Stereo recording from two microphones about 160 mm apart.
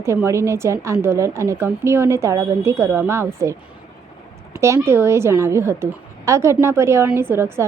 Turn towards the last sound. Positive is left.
turn(degrees=-15)  # may be behind; listen again after turning